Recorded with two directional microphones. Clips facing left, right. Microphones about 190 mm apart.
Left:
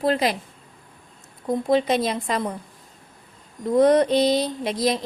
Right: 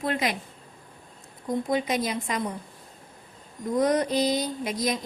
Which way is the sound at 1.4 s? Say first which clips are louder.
Left 6 dB; 30° left (ahead or behind).